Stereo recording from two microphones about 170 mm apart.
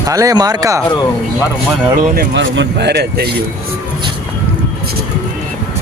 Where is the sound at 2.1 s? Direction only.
90° right; by 3.3 s 75° right (ahead or behind).